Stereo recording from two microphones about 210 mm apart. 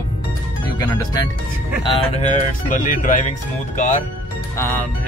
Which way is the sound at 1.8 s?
30° left (ahead or behind).